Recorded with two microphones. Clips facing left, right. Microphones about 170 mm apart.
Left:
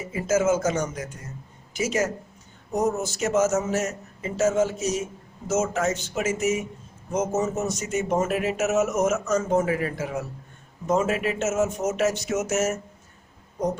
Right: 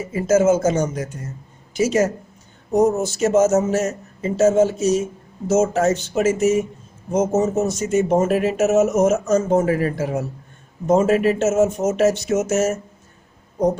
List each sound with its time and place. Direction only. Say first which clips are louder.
0.1 s speech: right 6 dB; 35° right (ahead or behind)